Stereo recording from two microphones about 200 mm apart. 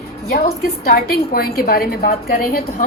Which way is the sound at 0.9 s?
50° left (ahead or behind).